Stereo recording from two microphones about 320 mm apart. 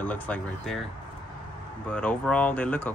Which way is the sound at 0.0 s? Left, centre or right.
Centre.